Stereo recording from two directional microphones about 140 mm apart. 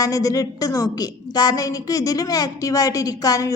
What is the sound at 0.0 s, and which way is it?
A woman's voice, 25° left (ahead or behind).